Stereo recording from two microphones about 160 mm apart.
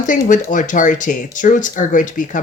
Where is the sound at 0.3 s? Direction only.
55° left (ahead or behind).